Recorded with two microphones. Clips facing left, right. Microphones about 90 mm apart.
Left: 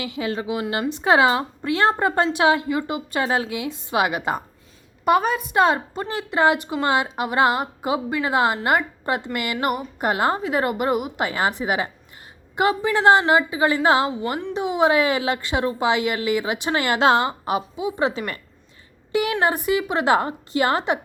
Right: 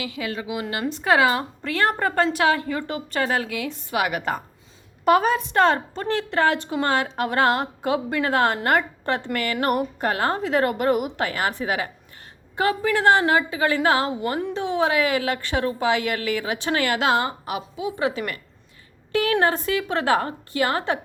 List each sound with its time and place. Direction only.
0.0 s a woman's voice: 30° left (ahead or behind)
5.0 s a woman's voice: centre (ahead or behind)
11.2 s a woman's voice: 20° left (ahead or behind)